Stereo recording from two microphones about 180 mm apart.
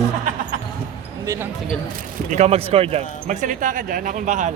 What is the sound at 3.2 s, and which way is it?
Speech, 45° right (ahead or behind).